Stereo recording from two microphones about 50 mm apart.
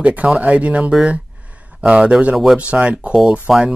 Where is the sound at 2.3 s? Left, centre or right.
Centre.